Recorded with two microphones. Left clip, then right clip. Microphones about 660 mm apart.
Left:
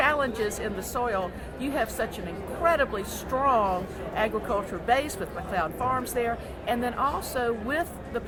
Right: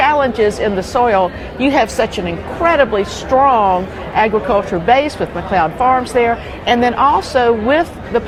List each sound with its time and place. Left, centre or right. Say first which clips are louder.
0.0 s a woman's voice: right 13 dB; right